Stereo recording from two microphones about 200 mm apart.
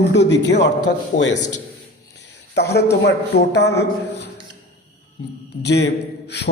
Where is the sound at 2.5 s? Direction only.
55° left (ahead or behind).